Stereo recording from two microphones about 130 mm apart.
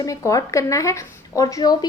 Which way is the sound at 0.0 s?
25° left (ahead or behind).